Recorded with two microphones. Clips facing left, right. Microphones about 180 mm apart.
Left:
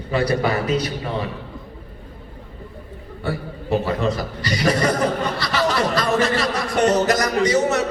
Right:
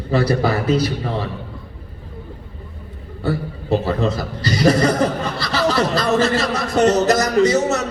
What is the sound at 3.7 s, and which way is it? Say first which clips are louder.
A man's voice: right 2 dB; 35° right (ahead or behind).